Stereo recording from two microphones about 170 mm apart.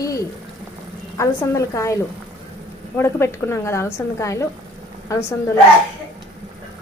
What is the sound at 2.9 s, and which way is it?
A woman's voice, 15° left (ahead or behind).